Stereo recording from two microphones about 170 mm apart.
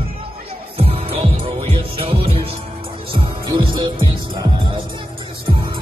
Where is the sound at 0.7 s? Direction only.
35° right (ahead or behind).